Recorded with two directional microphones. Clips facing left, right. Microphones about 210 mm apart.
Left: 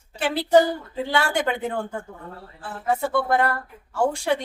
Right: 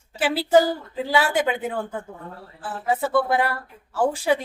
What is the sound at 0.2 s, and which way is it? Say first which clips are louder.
A woman's voice: even; 5° right (ahead or behind).